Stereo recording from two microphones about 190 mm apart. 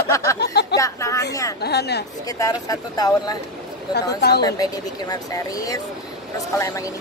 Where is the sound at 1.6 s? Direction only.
60° left (ahead or behind).